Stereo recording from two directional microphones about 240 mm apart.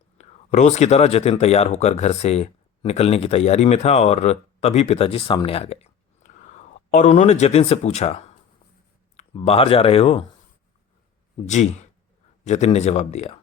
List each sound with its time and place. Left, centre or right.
0.2 s speech: left
11.4 s speech: left